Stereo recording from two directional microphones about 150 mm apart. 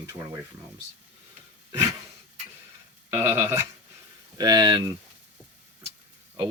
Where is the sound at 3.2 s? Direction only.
15° right (ahead or behind).